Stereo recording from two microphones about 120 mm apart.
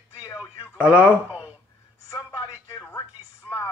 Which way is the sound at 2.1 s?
25° left (ahead or behind).